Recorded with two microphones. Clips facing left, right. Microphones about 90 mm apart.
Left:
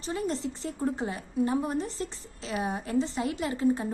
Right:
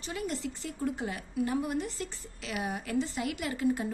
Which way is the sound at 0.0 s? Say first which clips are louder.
Left 4 dB; 35° left (ahead or behind).